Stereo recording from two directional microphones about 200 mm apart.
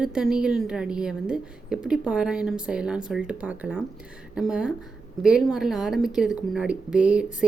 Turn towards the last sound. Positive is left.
turn(degrees=-5)  # may be behind; listen again after turning